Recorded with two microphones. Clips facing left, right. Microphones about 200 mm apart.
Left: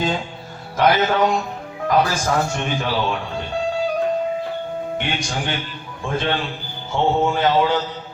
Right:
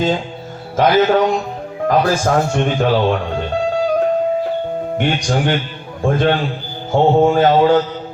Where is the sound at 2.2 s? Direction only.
50° right (ahead or behind).